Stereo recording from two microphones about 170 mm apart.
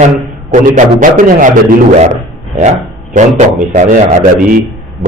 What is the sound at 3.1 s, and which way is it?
A man's voice, 45° right (ahead or behind).